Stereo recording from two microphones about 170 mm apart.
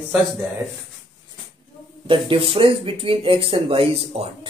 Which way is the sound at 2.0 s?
30° right (ahead or behind).